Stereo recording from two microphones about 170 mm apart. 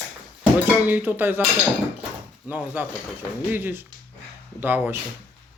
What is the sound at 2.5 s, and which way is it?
Speech, 10° right (ahead or behind).